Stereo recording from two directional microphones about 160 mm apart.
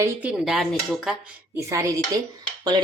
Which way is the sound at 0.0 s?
10° right (ahead or behind).